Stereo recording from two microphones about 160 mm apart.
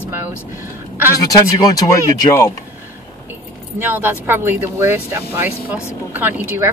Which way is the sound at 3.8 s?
10° right (ahead or behind).